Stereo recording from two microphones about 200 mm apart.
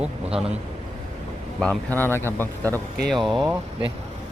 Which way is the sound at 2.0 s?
10° left (ahead or behind).